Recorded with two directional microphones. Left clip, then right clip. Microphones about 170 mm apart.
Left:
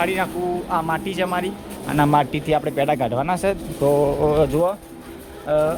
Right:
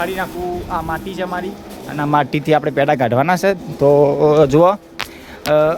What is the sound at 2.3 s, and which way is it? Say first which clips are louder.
Speech: right 5 dB; 30° right (ahead or behind).